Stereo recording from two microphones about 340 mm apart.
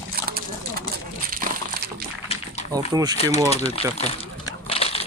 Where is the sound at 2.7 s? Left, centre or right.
Centre.